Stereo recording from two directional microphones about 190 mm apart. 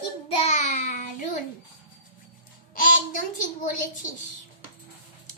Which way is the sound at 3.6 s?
45° left (ahead or behind).